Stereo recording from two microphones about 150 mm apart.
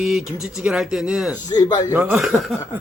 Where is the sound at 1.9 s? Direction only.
15° right (ahead or behind).